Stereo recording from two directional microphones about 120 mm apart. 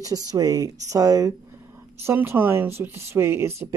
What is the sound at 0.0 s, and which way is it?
Speech, 30° right (ahead or behind).